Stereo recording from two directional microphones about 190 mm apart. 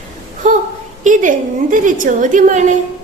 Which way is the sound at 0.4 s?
40° right (ahead or behind).